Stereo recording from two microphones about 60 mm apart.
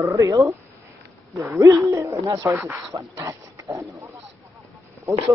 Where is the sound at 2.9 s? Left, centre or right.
Right.